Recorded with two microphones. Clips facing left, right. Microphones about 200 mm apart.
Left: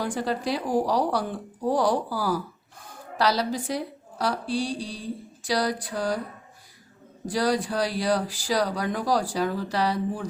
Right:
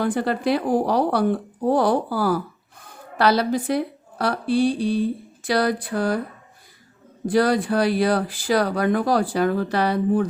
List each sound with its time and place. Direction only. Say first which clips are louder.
0.0 s speech: right 5 dB; 60° right (ahead or behind)
7.3 s speech: right 6 dB; 60° right (ahead or behind)